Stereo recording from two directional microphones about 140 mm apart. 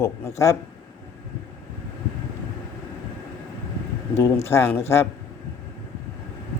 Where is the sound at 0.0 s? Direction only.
20° left (ahead or behind).